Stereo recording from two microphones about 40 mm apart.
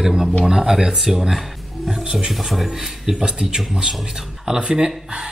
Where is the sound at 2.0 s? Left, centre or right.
Centre.